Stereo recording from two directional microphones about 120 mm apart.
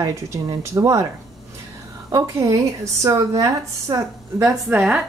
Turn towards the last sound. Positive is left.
turn(degrees=-10)  # may be behind; listen again after turning